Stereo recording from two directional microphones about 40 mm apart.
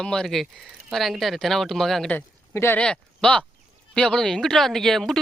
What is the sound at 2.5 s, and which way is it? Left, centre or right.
Speech, left.